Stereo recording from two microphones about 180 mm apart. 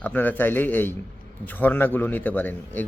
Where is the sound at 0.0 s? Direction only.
10° left (ahead or behind).